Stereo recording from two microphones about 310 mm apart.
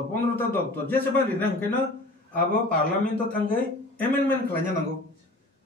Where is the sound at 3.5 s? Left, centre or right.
Centre.